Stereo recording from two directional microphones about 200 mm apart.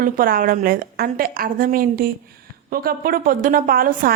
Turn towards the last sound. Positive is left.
turn(degrees=-45)  # may be behind; listen again after turning